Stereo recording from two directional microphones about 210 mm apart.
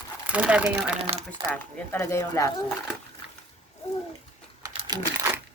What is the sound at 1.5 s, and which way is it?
Speech, 10° left (ahead or behind).